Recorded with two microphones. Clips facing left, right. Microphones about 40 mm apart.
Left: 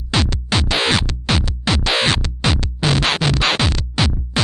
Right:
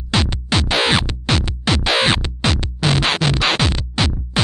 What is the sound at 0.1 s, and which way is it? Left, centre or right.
Music, centre.